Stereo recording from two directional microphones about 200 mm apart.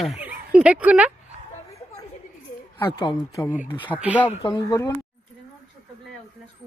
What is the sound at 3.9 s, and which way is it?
Speech, 5° right (ahead or behind).